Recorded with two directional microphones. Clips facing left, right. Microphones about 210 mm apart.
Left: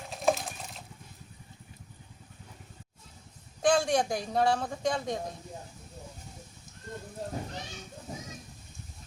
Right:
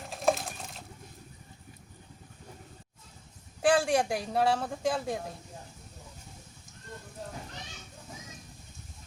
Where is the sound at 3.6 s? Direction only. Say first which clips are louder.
Even; 5° right (ahead or behind).